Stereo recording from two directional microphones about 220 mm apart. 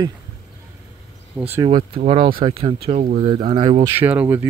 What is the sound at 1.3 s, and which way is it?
Speech, 10° right (ahead or behind).